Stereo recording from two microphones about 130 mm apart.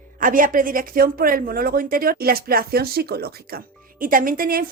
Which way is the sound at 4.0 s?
90° right.